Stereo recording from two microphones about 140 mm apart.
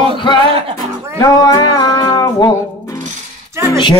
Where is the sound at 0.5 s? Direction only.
40° right (ahead or behind).